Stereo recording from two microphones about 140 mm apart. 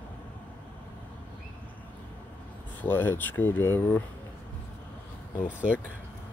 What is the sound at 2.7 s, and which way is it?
Speech, 15° left (ahead or behind).